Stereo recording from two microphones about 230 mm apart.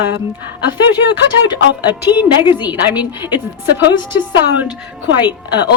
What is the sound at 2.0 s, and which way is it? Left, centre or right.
Speech, centre.